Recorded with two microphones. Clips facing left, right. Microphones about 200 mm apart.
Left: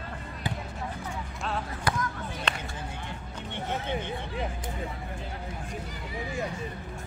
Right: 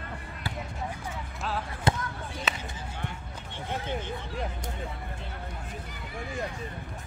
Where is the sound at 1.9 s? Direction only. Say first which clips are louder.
Right 2 dB; 25° right (ahead or behind).